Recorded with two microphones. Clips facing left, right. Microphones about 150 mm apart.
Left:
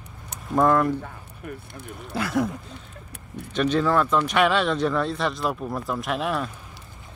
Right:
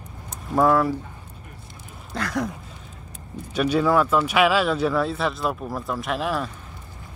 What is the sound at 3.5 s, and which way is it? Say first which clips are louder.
Speech: right 1 dB; 10° right (ahead or behind).